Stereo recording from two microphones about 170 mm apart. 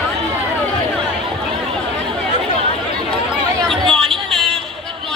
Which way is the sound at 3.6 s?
5° left (ahead or behind).